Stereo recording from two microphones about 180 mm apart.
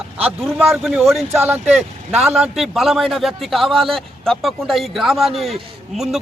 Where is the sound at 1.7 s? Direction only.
Centre (ahead or behind).